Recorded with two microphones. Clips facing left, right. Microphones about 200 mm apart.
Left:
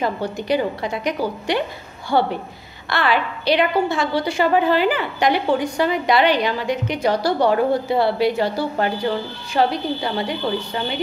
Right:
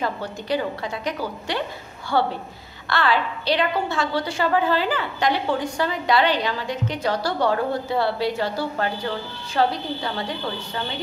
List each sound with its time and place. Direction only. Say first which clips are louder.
0.0 s a woman's voice: left 5 dB; 15° left (ahead or behind)